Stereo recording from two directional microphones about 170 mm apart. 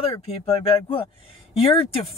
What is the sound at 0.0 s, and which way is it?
Speech, 35° left (ahead or behind).